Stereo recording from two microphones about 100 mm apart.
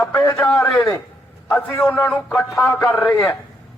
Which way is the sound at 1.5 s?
20° left (ahead or behind).